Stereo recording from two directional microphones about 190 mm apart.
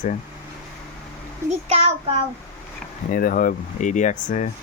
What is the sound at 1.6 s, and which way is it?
Speech, 35° right (ahead or behind).